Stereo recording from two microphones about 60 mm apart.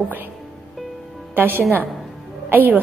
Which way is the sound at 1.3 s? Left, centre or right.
Right.